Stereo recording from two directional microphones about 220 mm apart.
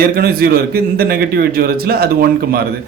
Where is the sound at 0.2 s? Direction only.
45° right (ahead or behind).